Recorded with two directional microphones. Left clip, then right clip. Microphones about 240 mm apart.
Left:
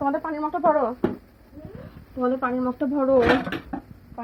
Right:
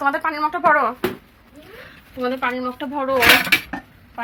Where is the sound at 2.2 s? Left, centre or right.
Centre.